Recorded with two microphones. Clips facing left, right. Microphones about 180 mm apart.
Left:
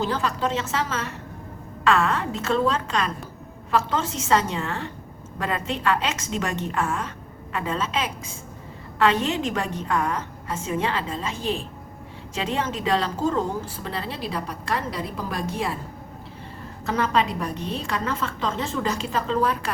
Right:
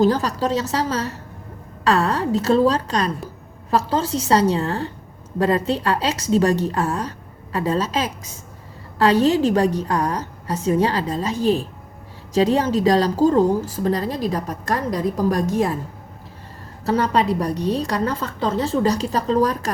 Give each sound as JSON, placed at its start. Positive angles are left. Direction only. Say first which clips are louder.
{"t": 0.0, "sound": "a woman's voice", "louder": "right 7 dB", "side_deg": -40}
{"t": 16.8, "sound": "a woman's voice", "louder": "right 4 dB", "side_deg": -35}